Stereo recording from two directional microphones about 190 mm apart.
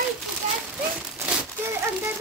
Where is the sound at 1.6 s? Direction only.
15° right (ahead or behind).